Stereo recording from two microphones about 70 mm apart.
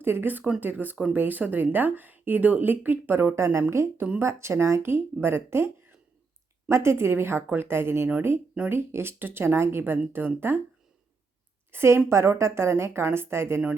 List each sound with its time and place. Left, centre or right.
0.0 s a woman's voice: right
11.7 s a woman's voice: right